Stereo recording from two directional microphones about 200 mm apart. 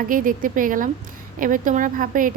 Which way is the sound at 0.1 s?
45° right (ahead or behind).